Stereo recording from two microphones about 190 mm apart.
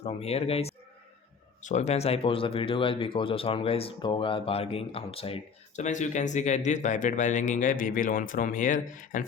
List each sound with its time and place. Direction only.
0.0 s speech: 30° left (ahead or behind)